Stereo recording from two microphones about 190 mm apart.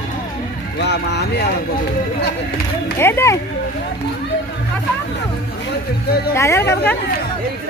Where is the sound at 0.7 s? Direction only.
65° left (ahead or behind).